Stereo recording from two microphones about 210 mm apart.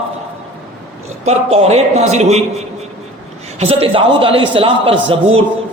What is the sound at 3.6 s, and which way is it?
A man's voice, 30° right (ahead or behind).